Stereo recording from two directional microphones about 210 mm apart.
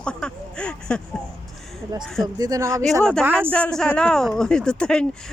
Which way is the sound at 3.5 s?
5° left (ahead or behind).